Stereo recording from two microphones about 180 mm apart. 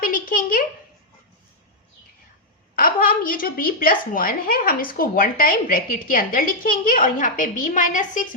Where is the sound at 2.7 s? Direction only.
50° left (ahead or behind).